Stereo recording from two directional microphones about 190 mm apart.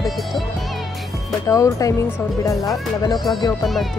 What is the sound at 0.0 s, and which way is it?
Music, centre (ahead or behind).